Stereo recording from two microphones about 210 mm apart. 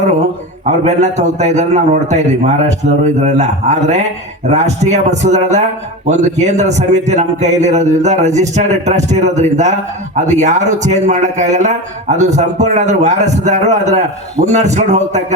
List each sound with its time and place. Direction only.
0.6 s a man's voice: 35° right (ahead or behind)